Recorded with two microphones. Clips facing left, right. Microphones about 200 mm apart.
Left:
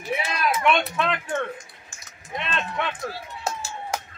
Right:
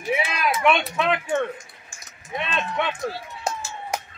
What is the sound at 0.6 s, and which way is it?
Speech, 5° right (ahead or behind).